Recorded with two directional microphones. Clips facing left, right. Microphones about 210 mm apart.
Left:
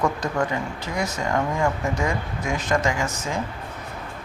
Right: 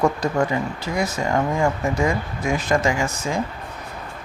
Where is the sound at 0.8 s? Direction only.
10° right (ahead or behind).